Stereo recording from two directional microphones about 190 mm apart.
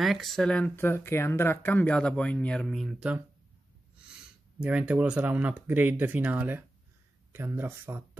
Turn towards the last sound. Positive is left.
turn(degrees=-10)  # may be behind; listen again after turning